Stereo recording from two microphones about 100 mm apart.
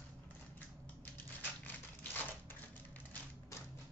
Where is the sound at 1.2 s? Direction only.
20° left (ahead or behind).